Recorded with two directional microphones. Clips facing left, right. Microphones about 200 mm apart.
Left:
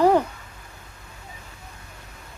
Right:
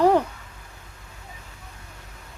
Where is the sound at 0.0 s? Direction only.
Centre (ahead or behind).